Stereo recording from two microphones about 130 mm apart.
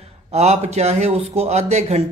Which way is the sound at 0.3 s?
55° right (ahead or behind).